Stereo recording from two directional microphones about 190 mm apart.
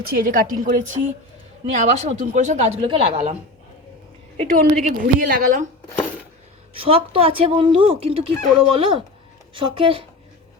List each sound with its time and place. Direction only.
0.0 s a woman's voice: 50° right (ahead or behind); by 3.0 s 30° right (ahead or behind)
4.4 s a woman's voice: 45° right (ahead or behind)
6.7 s speech: 30° right (ahead or behind)